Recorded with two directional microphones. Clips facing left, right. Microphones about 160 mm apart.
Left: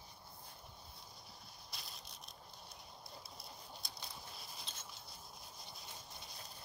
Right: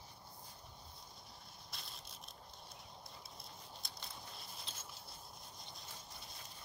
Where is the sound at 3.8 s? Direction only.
Centre (ahead or behind).